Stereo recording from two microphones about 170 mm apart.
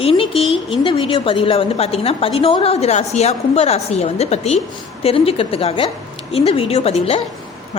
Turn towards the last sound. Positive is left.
turn(degrees=35)  # may be behind; listen again after turning